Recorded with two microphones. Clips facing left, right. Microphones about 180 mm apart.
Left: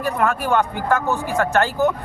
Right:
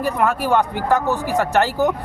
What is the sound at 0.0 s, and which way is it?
Speech, 15° right (ahead or behind).